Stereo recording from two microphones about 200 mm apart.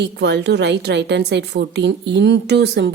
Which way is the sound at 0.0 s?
55° right (ahead or behind).